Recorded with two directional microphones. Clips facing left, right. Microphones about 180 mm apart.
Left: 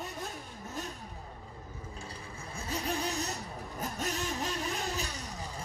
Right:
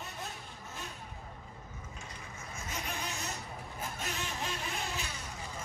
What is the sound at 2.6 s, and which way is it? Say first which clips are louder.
Vehicle: left 7 dB; 35° left (ahead or behind).